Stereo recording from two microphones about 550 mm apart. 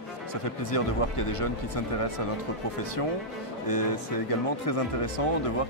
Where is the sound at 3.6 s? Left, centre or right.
Left.